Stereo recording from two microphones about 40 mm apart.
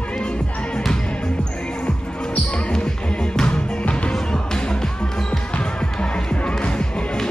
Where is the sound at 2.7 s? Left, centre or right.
Left.